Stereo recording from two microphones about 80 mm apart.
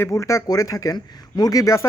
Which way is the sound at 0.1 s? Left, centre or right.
Left.